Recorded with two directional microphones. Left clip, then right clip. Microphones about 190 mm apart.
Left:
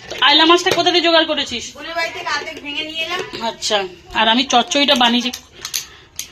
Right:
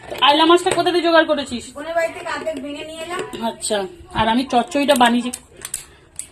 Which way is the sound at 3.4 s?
15° right (ahead or behind).